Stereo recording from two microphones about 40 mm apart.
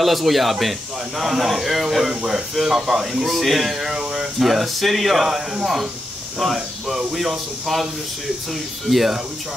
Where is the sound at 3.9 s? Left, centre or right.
Centre.